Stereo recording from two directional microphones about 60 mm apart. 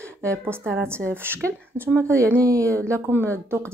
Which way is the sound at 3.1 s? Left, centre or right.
Right.